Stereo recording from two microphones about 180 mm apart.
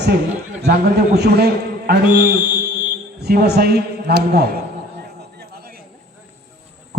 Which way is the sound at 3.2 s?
60° right (ahead or behind).